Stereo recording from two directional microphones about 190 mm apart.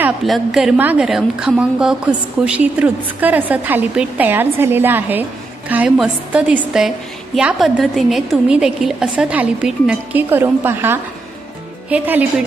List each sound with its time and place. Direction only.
0.0 s a woman's voice: centre (ahead or behind)